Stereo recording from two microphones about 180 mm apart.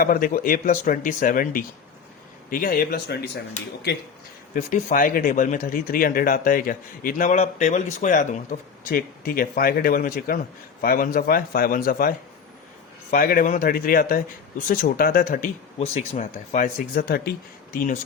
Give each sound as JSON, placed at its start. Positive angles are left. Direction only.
{"t": 0.0, "sound": "speech", "side_deg": 50}
{"t": 4.5, "sound": "speech", "side_deg": 45}
{"t": 15.8, "sound": "speech", "side_deg": 40}